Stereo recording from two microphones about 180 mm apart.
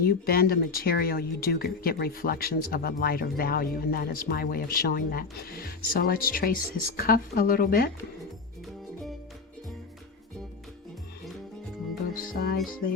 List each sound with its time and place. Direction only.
0.0 s speech: 55° left (ahead or behind)
12.1 s music: 55° left (ahead or behind)